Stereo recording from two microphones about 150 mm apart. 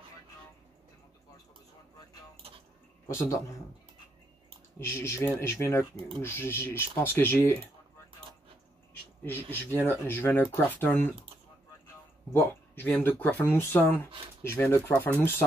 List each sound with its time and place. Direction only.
3.2 s a man's voice: 20° left (ahead or behind)
4.7 s speech: 15° left (ahead or behind)
9.2 s speech: 15° left (ahead or behind)
12.3 s speech: 15° left (ahead or behind)